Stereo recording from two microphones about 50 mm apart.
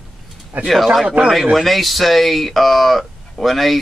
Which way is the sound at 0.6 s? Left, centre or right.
Centre.